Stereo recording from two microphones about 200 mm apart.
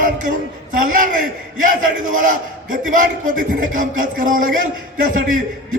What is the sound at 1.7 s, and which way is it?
A man's voice, 40° right (ahead or behind).